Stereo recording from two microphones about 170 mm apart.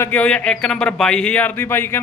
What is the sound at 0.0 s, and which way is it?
A man's voice, 10° left (ahead or behind).